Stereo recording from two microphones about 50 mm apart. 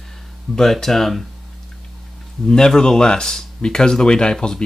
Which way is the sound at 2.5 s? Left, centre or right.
Centre.